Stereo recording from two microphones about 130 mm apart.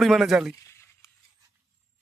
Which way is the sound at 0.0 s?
Centre (ahead or behind).